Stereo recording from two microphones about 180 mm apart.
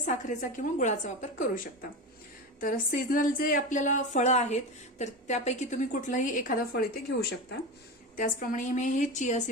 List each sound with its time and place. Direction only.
0.1 s a woman's voice: 45° left (ahead or behind)